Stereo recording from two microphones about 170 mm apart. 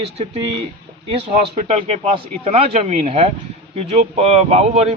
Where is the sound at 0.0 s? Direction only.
35° right (ahead or behind).